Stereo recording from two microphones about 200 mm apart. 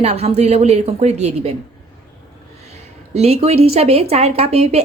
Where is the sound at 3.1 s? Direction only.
30° right (ahead or behind).